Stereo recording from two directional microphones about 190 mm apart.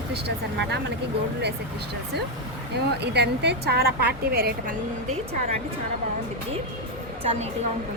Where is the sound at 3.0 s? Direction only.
60° right (ahead or behind).